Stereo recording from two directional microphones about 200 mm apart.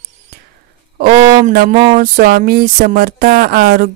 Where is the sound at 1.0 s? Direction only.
30° right (ahead or behind).